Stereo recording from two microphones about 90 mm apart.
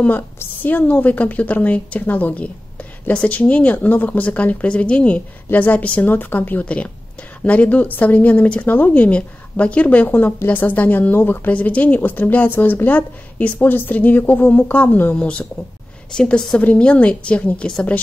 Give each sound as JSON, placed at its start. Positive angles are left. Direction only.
{"t": 0.4, "sound": "a woman's voice", "side_deg": 20}